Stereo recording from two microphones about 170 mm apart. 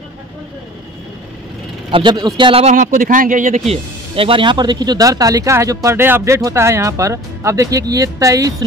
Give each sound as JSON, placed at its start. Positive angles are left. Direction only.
{"t": 1.9, "sound": "speech", "side_deg": -30}
{"t": 2.6, "sound": "speech", "side_deg": -45}